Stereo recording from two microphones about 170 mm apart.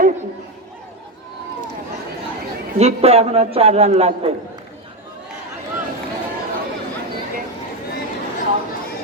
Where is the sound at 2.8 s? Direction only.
35° right (ahead or behind).